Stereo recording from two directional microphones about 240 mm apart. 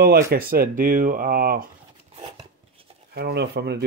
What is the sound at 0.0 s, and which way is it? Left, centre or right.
Speech, right.